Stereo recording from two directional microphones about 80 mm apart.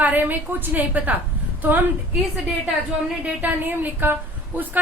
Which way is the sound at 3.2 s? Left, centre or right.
Right.